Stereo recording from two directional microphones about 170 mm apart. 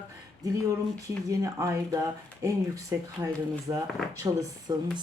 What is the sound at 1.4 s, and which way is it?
Speech, 20° right (ahead or behind).